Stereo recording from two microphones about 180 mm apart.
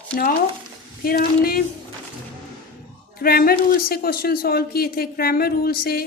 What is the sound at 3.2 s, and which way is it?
A woman's voice, 55° left (ahead or behind).